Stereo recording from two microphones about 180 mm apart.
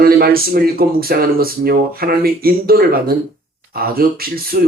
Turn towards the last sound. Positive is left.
turn(degrees=-55)  # may be behind; listen again after turning